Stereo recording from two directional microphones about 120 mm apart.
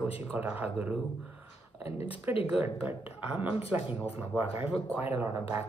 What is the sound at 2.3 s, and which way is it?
Speech, 15° right (ahead or behind).